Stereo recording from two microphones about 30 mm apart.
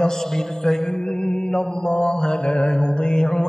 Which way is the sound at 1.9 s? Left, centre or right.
Left.